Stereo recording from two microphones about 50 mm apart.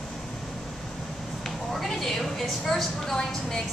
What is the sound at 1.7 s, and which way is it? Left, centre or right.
A woman's voice, centre.